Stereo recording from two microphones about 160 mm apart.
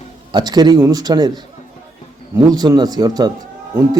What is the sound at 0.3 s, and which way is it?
Speech, 25° right (ahead or behind).